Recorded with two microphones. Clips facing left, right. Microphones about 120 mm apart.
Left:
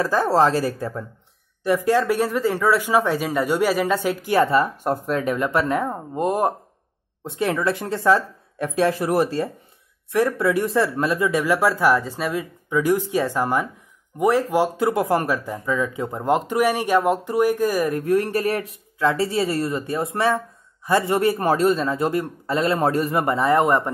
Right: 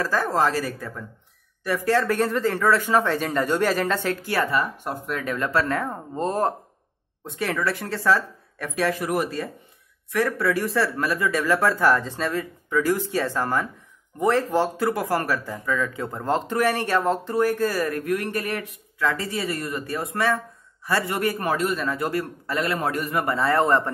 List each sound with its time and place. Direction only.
0.0 s a man's voice: 20° left (ahead or behind)
0.3 s speech: 30° left (ahead or behind)
1.6 s speech: 20° left (ahead or behind)
4.8 s speech: 35° left (ahead or behind)
5.2 s a man's voice: 20° left (ahead or behind)